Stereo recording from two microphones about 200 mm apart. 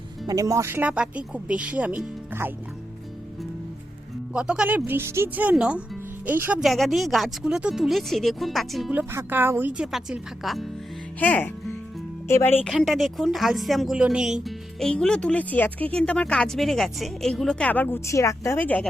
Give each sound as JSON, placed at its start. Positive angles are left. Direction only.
{"t": 0.3, "sound": "speech", "side_deg": -15}
{"t": 4.4, "sound": "speech", "side_deg": -5}